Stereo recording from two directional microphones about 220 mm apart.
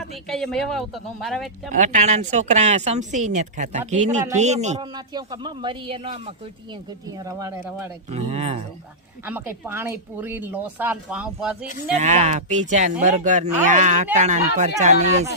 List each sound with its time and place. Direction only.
0.3 s speech: centre (ahead or behind)
1.7 s speech: 35° right (ahead or behind)
4.8 s speech: 20° right (ahead or behind)
8.1 s speech: 30° right (ahead or behind)
9.2 s speech: 10° right (ahead or behind)
11.9 s speech: 30° right (ahead or behind)